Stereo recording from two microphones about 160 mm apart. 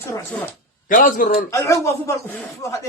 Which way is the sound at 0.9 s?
55° left (ahead or behind).